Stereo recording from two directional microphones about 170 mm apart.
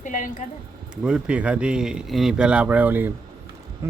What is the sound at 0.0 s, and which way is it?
Speech, 50° left (ahead or behind).